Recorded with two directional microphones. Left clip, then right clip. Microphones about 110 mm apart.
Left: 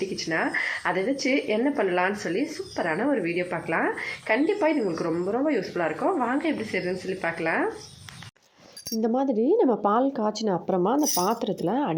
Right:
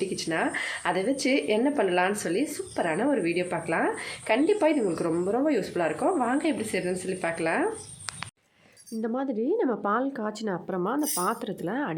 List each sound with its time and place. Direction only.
0.2 s speech: 20° right (ahead or behind)
9.0 s speech: 20° left (ahead or behind)